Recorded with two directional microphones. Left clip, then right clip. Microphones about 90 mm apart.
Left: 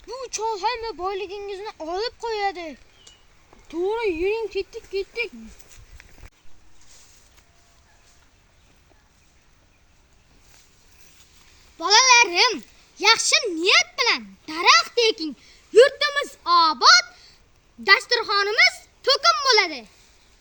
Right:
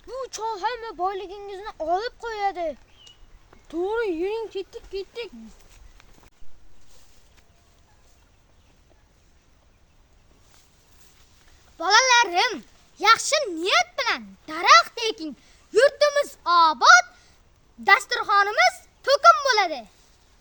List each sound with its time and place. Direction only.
0.1 s speech: 40° right (ahead or behind)
11.8 s babbling: 40° right (ahead or behind)
13.0 s speech: 40° right (ahead or behind)